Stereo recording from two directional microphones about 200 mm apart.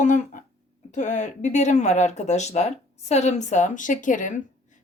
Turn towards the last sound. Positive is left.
turn(degrees=40)  # may be behind; listen again after turning